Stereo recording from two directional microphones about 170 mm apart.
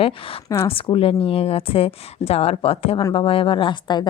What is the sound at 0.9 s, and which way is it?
A woman's voice, 35° left (ahead or behind).